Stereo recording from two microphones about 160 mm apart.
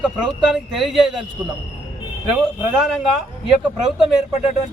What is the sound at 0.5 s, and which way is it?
Speech, centre (ahead or behind).